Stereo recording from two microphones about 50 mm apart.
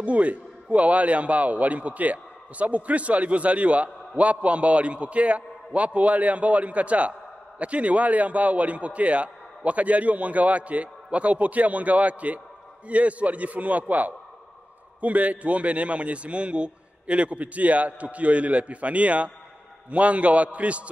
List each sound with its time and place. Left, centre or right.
0.0 s a man's voice: right